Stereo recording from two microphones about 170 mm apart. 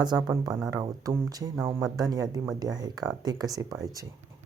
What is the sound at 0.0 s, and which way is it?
Speech, 25° right (ahead or behind).